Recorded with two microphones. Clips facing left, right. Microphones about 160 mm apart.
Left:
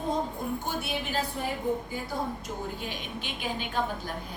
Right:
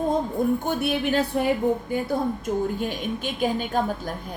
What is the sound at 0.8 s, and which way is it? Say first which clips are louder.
Speech: right 9 dB; 65° right (ahead or behind).